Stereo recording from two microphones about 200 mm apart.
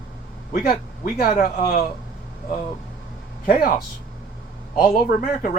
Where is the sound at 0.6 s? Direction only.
50° left (ahead or behind).